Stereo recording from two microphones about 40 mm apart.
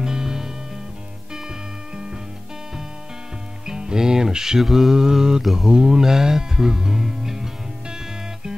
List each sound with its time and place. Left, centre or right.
0.0 s music: centre
3.6 s music: centre
4.6 s mantra: centre
5.7 s speech: centre